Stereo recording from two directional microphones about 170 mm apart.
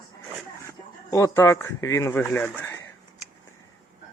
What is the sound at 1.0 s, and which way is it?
A man's voice, 20° left (ahead or behind).